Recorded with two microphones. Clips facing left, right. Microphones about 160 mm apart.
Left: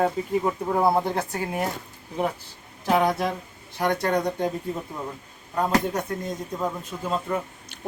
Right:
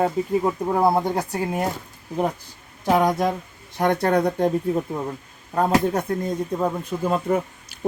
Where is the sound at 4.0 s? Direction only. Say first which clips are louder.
Right 4 dB; 55° right (ahead or behind).